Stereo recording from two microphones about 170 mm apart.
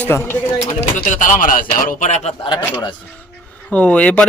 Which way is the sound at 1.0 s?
45° left (ahead or behind).